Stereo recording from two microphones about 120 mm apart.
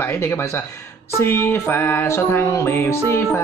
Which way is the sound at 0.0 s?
20° left (ahead or behind).